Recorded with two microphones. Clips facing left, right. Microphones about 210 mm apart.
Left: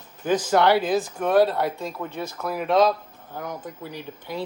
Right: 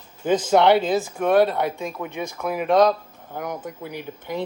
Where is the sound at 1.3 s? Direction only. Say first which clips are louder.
Right 1 dB; 5° left (ahead or behind).